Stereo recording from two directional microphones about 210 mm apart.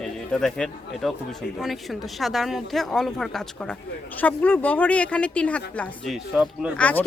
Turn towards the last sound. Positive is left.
turn(degrees=0)  # may be behind; listen again after turning